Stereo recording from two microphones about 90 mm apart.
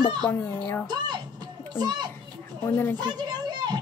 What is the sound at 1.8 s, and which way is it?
Speech, 50° right (ahead or behind).